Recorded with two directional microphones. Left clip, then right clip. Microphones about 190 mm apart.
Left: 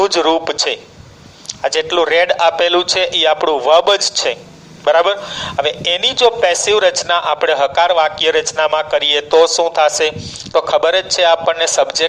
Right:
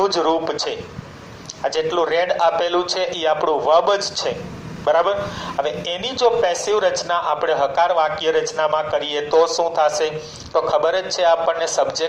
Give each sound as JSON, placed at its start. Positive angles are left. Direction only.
{"t": 0.0, "sound": "a man's voice", "side_deg": 60}